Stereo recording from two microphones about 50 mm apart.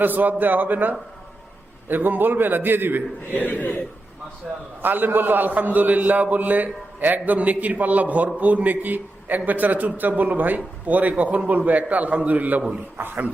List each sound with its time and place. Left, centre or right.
0.0 s a man's voice: right
3.3 s a man's voice: left
4.5 s a man's voice: centre
4.8 s a man's voice: right